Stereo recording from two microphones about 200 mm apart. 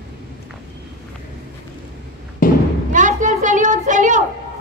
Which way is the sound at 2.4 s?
45° left (ahead or behind).